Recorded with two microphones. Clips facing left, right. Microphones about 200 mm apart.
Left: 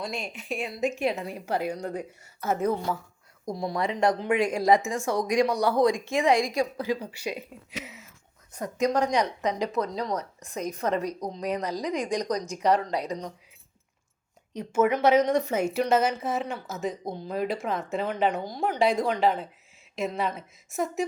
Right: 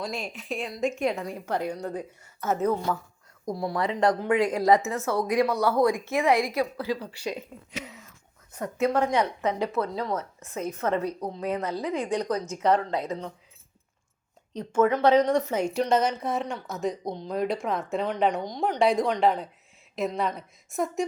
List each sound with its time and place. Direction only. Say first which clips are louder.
0.0 s a woman's voice: right 1 dB; centre (ahead or behind)
1.0 s a woman's voice: right 1 dB; 25° left (ahead or behind)
1.5 s speech: left 1 dB; 10° left (ahead or behind)
8.8 s speech: even; 15° left (ahead or behind)
14.5 s a woman's voice: right 1 dB; 10° left (ahead or behind)